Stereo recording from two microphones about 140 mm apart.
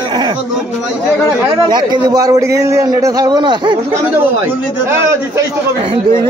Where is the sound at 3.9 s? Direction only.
15° right (ahead or behind).